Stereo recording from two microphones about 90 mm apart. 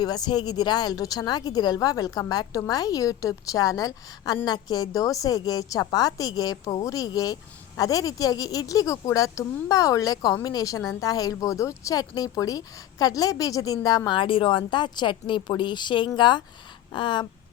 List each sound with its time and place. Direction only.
0.0 s speech: 50° left (ahead or behind)
14.2 s a woman's voice: 70° left (ahead or behind)